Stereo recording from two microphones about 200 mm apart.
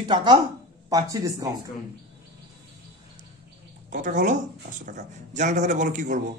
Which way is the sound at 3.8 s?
40° right (ahead or behind).